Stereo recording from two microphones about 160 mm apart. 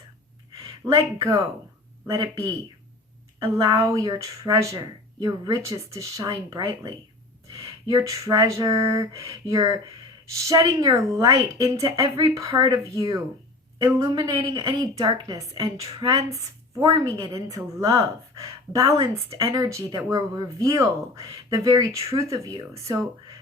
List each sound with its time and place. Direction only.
0.9 s speech: 20° right (ahead or behind)
7.5 s a sound: 20° right (ahead or behind)
9.3 s speech: 20° right (ahead or behind)